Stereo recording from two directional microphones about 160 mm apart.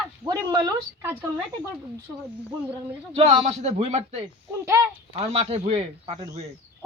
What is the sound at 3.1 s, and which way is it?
A man's voice, 40° right (ahead or behind).